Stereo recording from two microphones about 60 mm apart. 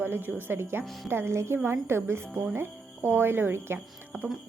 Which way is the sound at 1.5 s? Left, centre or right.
Right.